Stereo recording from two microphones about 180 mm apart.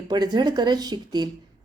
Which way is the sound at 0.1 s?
25° right (ahead or behind).